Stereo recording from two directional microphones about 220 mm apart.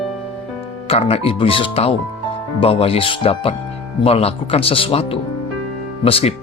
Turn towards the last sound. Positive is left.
turn(degrees=25)  # may be behind; listen again after turning